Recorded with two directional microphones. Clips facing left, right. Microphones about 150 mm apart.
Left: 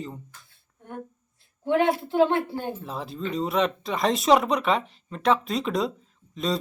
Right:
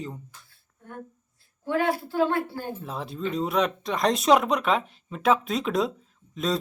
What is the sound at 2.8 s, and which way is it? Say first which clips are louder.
Speech: right 1 dB; centre (ahead or behind).